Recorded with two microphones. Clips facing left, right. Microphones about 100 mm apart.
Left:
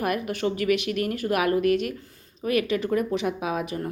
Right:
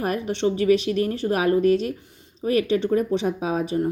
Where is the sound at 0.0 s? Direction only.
30° right (ahead or behind).